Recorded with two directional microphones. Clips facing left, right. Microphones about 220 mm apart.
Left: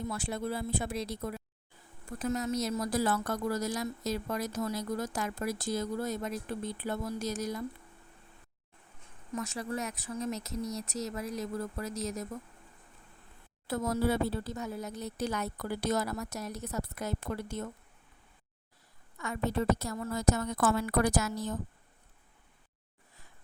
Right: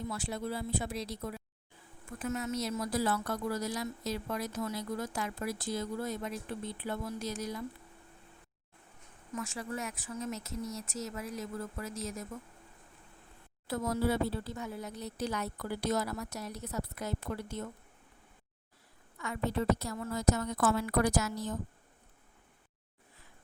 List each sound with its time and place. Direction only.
0.1 s speech: 50° left (ahead or behind)
2.1 s speech: 40° left (ahead or behind)
9.3 s speech: 40° left (ahead or behind)
13.7 s speech: 45° left (ahead or behind)
19.2 s speech: 45° left (ahead or behind)